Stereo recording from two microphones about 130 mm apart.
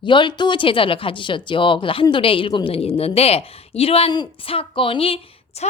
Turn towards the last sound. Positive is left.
turn(degrees=60)  # may be behind; listen again after turning